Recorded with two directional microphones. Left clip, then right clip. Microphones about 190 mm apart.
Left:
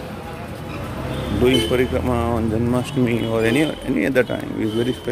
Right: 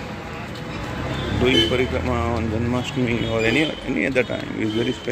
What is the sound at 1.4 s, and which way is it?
Speech, 25° left (ahead or behind).